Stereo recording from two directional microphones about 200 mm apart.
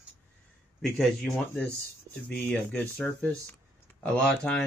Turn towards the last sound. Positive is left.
turn(degrees=5)  # may be behind; listen again after turning